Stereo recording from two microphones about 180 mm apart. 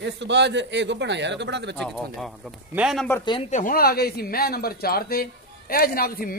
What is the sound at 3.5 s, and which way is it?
A man's voice, 45° left (ahead or behind).